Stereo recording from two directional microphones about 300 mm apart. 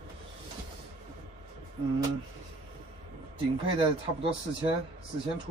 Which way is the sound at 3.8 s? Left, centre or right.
Centre.